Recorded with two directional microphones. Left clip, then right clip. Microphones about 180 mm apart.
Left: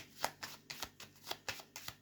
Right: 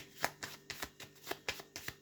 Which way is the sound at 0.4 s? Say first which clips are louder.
Right 2 dB; centre (ahead or behind).